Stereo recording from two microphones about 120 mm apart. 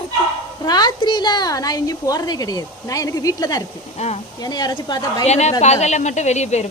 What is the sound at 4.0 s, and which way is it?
Speech, 65° left (ahead or behind).